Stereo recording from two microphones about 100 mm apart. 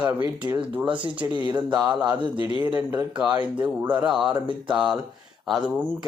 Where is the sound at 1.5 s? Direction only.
45° right (ahead or behind).